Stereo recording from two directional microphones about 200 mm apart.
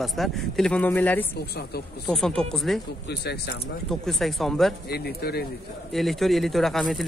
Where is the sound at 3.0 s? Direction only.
55° left (ahead or behind).